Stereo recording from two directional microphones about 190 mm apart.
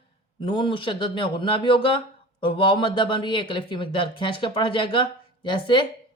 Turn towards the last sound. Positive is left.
turn(degrees=25)  # may be behind; listen again after turning